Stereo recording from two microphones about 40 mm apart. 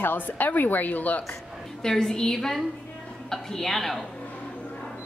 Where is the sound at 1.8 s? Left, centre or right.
Centre.